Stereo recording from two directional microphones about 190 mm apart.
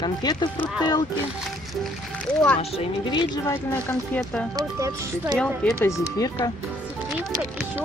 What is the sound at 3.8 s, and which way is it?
Speech, 10° left (ahead or behind).